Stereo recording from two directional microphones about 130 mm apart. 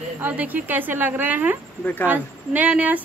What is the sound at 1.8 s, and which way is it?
Speech, 15° left (ahead or behind).